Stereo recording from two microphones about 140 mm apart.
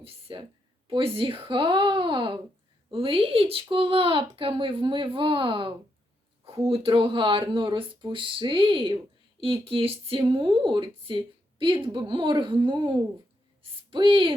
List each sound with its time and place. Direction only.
0.0 s a woman's voice: 40° right (ahead or behind)